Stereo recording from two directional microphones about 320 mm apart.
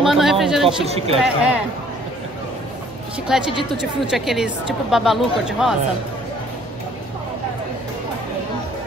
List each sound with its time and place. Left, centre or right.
0.0 s a sound: centre
0.7 s speech: centre
1.1 s speech: centre
3.3 s speech: centre